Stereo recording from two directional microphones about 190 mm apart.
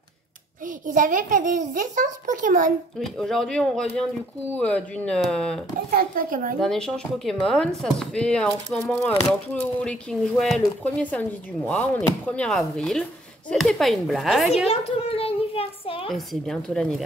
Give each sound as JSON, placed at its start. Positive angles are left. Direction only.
{"t": 0.8, "sound": "a child's voice", "side_deg": -45}
{"t": 3.0, "sound": "speech", "side_deg": 0}
{"t": 5.9, "sound": "a child's voice", "side_deg": -50}
{"t": 6.6, "sound": "speech", "side_deg": 0}
{"t": 14.7, "sound": "a sound", "side_deg": 30}
{"t": 16.4, "sound": "speech", "side_deg": 5}